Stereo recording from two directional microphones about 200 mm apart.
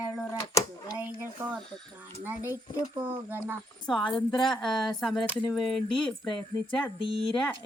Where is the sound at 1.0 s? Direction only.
10° right (ahead or behind).